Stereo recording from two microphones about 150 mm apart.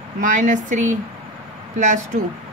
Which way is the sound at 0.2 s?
60° right (ahead or behind).